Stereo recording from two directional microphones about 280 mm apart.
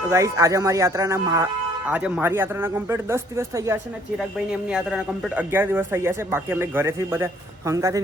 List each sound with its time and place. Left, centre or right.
0.1 s a man's voice: centre